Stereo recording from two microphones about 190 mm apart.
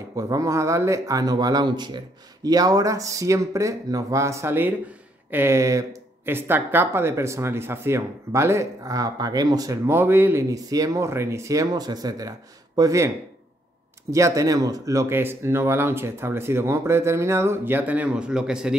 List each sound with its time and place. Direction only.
0.1 s speech: 15° right (ahead or behind)
14.1 s speech: 15° right (ahead or behind)